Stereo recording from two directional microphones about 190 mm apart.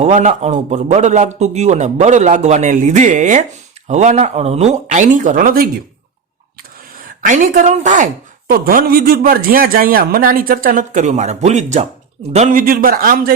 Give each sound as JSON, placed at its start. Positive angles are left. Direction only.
{"t": 0.0, "sound": "a man's voice", "side_deg": -40}
{"t": 7.0, "sound": "speech", "side_deg": -40}